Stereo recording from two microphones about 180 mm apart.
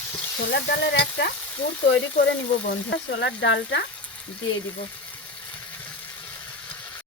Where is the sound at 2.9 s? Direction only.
85° left.